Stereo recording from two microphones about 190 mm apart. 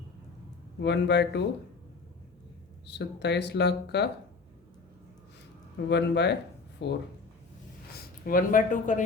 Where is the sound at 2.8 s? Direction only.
65° left (ahead or behind).